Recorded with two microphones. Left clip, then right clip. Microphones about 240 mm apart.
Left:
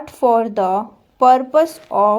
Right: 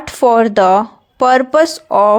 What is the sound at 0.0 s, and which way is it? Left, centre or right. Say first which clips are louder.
Speech: right 5 dB; right.